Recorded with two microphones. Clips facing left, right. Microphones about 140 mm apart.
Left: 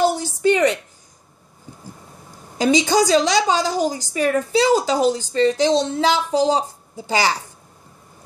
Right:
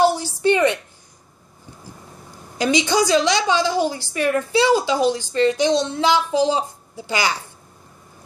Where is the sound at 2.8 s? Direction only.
40° left (ahead or behind).